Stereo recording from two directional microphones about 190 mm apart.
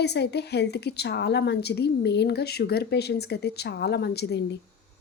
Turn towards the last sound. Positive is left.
turn(degrees=60)  # may be behind; listen again after turning